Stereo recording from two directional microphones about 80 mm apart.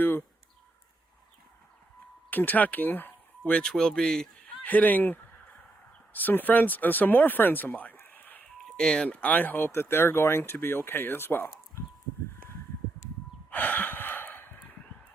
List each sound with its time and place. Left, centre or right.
0.0 s a sound: left
2.3 s speech: left
4.6 s speech: centre
13.5 s gasp: left